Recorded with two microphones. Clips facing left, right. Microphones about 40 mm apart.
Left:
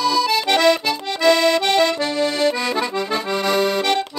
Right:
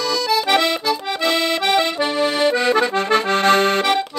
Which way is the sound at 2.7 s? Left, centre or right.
Right.